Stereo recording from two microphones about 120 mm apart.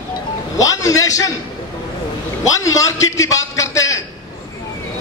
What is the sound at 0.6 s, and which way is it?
Speech, 30° left (ahead or behind).